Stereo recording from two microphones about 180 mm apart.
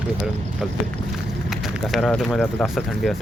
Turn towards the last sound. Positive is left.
turn(degrees=0)  # may be behind; listen again after turning